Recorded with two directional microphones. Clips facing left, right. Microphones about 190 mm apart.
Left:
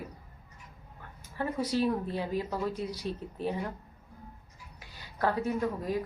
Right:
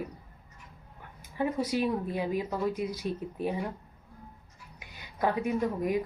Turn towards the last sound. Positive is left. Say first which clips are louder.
# right 2 dB
turn(degrees=-15)  # may be behind; listen again after turning